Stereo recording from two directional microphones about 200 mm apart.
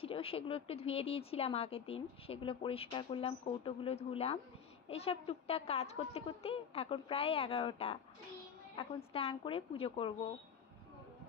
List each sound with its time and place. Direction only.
0.0 s speech: 30° left (ahead or behind)